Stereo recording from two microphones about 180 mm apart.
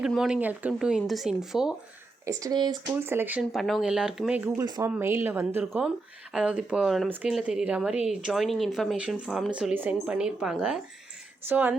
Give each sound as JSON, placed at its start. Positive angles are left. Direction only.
{"t": 0.0, "sound": "speech", "side_deg": -5}
{"t": 2.2, "sound": "speech", "side_deg": -20}
{"t": 3.5, "sound": "speech", "side_deg": 0}
{"t": 4.6, "sound": "speech", "side_deg": -25}
{"t": 4.9, "sound": "speech", "side_deg": -10}